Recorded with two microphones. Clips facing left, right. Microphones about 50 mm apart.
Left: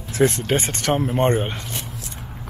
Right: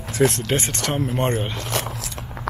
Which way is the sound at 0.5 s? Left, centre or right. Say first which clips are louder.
Left 3 dB; centre.